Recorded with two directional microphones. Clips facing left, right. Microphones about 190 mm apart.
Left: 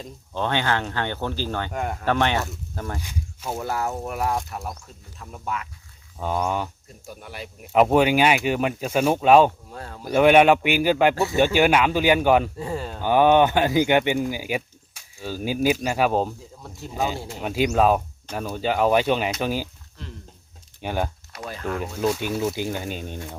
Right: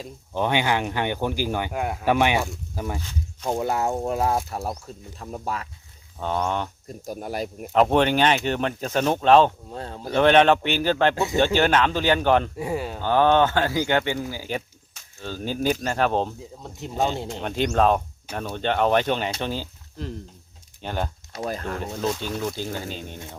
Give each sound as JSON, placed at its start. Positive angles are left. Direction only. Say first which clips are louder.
{"t": 0.0, "sound": "speech", "louder": "right 2 dB", "side_deg": -15}
{"t": 3.0, "sound": "speech", "louder": "right 2 dB", "side_deg": 10}
{"t": 3.6, "sound": "speech", "louder": "right 2 dB", "side_deg": -20}
{"t": 6.1, "sound": "speech", "louder": "left 1 dB", "side_deg": 5}
{"t": 7.0, "sound": "speech", "louder": "right 8 dB", "side_deg": -40}
{"t": 7.7, "sound": "speech", "louder": "left 2 dB", "side_deg": 5}
{"t": 9.7, "sound": "speech", "louder": "right 3 dB", "side_deg": -25}
{"t": 10.1, "sound": "speech", "louder": "left 2 dB", "side_deg": 10}
{"t": 11.1, "sound": "speech", "louder": "left 1 dB", "side_deg": -20}
{"t": 11.3, "sound": "speech", "louder": "left 1 dB", "side_deg": 10}
{"t": 12.5, "sound": "speech", "louder": "right 2 dB", "side_deg": -10}
{"t": 13.0, "sound": "speech", "louder": "left 2 dB", "side_deg": 15}
{"t": 20.8, "sound": "speech", "louder": "left 2 dB", "side_deg": 10}